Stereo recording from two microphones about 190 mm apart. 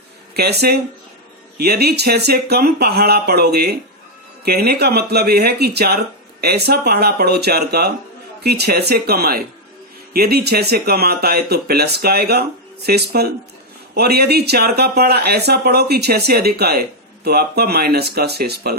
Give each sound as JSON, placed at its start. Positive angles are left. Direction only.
{"t": 0.3, "sound": "speech", "side_deg": -55}